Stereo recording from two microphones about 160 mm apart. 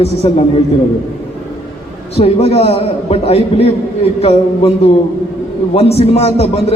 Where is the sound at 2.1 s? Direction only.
40° left (ahead or behind).